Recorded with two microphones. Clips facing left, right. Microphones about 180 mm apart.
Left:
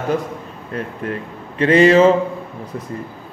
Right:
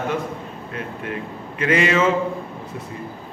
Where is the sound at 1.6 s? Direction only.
35° left (ahead or behind).